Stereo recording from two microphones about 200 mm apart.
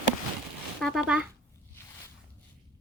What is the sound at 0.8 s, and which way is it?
Speech, centre (ahead or behind).